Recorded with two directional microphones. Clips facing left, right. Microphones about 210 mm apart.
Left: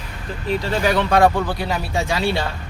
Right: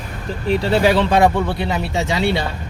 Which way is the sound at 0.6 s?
30° right (ahead or behind).